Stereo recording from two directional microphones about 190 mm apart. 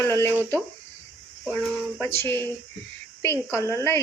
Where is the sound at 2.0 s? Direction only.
10° left (ahead or behind).